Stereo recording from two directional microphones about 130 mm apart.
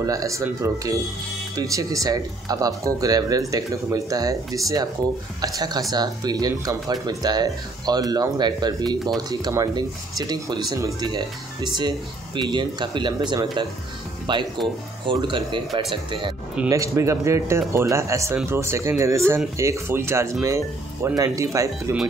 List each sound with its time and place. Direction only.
0.0 s speech: 25° right (ahead or behind)
16.6 s speech: 25° right (ahead or behind)